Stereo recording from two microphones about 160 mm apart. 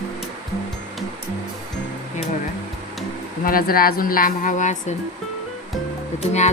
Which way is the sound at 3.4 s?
65° left (ahead or behind).